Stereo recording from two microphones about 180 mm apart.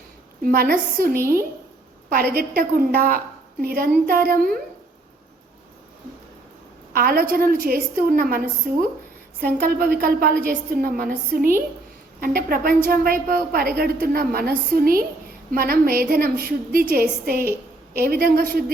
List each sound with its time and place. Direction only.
0.4 s a woman's voice: 55° right (ahead or behind)
2.3 s a woman's voice: 55° right (ahead or behind)
6.9 s a woman's voice: 55° right (ahead or behind)